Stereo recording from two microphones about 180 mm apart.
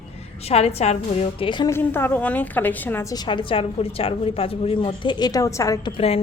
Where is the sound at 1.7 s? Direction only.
10° left (ahead or behind).